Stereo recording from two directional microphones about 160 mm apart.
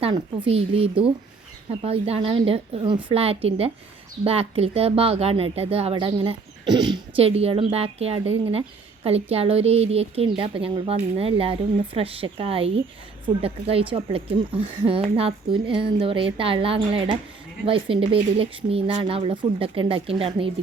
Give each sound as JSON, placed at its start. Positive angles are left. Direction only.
{"t": 0.0, "sound": "a woman's voice", "side_deg": -35}